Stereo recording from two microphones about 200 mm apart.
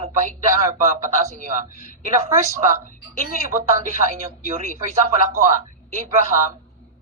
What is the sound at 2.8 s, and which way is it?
Speech, 45° left (ahead or behind).